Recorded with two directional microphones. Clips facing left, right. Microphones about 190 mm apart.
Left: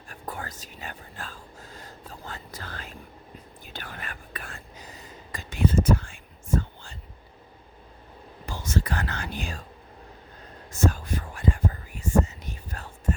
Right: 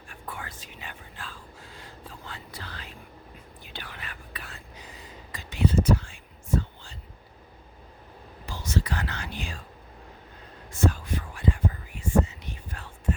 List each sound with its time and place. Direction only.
0.1 s speech: 40° left (ahead or behind)
3.7 s whispering: 45° left (ahead or behind)
8.4 s speech: 50° left (ahead or behind)
10.7 s a sound: 45° left (ahead or behind)